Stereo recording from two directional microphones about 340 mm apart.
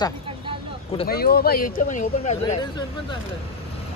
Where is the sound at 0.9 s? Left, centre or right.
Left.